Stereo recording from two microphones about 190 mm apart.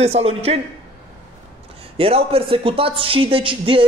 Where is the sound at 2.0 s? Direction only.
30° right (ahead or behind).